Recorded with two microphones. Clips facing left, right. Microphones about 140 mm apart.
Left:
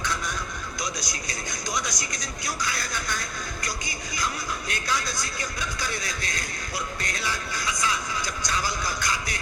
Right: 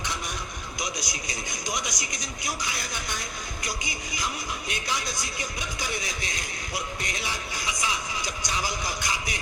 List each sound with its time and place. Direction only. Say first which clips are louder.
0.8 s a man's voice: even; 15° right (ahead or behind)